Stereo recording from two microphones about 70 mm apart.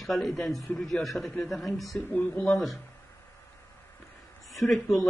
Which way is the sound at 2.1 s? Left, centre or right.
Left.